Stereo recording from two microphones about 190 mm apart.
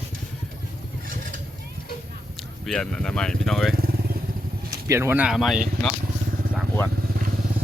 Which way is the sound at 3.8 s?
55° right (ahead or behind).